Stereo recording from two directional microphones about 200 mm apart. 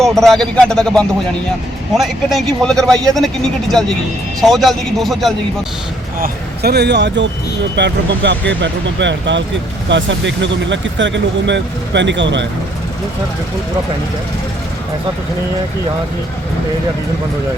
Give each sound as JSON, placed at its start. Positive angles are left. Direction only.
{"t": 0.0, "sound": "speech", "side_deg": 0}
{"t": 6.1, "sound": "speech", "side_deg": -50}